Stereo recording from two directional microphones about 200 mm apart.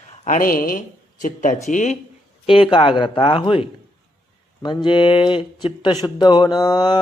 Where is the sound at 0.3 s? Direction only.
45° left (ahead or behind).